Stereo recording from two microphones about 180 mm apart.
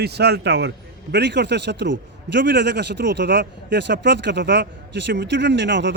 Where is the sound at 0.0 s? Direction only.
65° right (ahead or behind).